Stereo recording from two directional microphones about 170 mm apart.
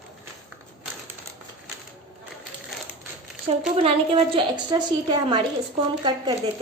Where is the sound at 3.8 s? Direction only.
35° right (ahead or behind).